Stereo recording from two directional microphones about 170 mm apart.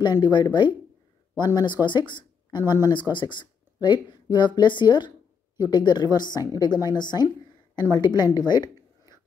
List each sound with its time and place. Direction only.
0.0 s speech: 25° left (ahead or behind)